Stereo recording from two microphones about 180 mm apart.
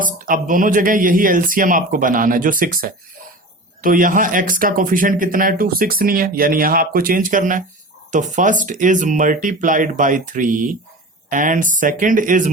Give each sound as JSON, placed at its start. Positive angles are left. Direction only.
{"t": 0.0, "sound": "speech", "side_deg": -50}